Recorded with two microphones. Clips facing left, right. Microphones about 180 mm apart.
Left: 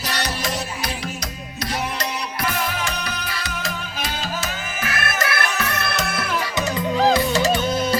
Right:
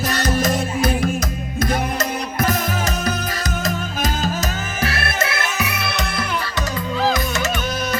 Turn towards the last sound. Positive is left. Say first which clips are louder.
# left 3 dB
turn(degrees=30)  # may be behind; listen again after turning